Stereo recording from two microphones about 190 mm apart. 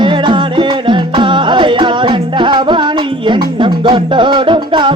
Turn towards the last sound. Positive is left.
turn(degrees=-25)  # may be behind; listen again after turning